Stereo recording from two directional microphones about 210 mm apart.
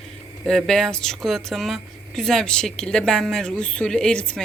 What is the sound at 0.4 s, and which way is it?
Speech, centre (ahead or behind).